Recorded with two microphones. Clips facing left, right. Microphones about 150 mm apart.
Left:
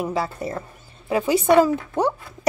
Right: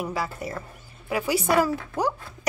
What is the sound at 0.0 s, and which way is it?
A woman's voice, 25° left (ahead or behind).